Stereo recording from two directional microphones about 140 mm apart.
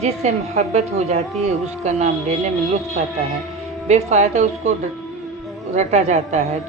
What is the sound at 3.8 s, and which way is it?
Speech, 55° right (ahead or behind).